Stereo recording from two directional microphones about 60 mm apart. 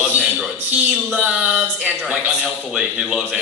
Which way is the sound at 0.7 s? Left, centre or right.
Right.